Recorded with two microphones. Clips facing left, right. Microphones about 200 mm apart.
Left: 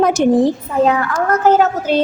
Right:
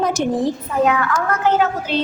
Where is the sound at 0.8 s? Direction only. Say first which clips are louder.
Left 3 dB; 35° left (ahead or behind).